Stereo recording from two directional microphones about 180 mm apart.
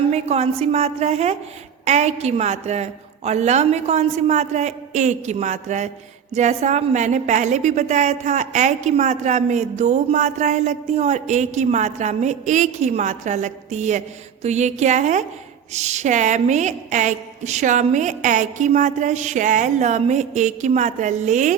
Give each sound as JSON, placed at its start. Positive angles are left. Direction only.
{"t": 0.1, "sound": "a woman's voice", "side_deg": -35}